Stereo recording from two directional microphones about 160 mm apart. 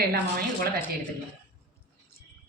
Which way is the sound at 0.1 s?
65° right (ahead or behind).